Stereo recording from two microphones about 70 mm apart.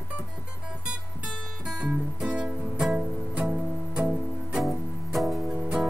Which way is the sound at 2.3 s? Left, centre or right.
Centre.